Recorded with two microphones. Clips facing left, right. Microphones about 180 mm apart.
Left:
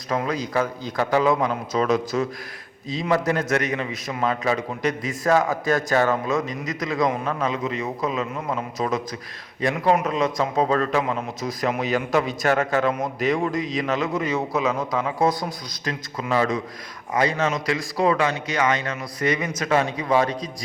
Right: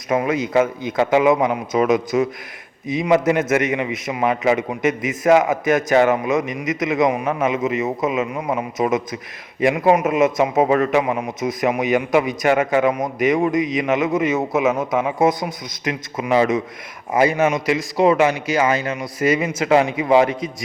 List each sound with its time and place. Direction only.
0.5 s a man's voice: 20° right (ahead or behind)
7.6 s a man's voice: 5° right (ahead or behind)
7.9 s a man's voice: 20° right (ahead or behind)